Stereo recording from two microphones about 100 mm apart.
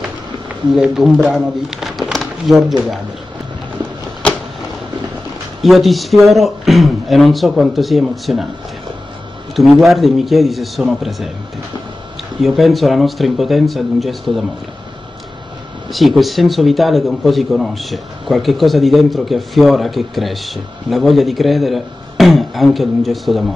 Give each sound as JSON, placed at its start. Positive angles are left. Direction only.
{"t": 0.7, "sound": "speech", "side_deg": -5}
{"t": 5.6, "sound": "speech", "side_deg": 0}
{"t": 9.6, "sound": "speech", "side_deg": 0}
{"t": 12.4, "sound": "speech", "side_deg": 0}
{"t": 15.9, "sound": "speech", "side_deg": 0}